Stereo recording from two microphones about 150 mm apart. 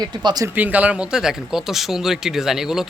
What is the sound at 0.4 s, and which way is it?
Speech, 10° right (ahead or behind).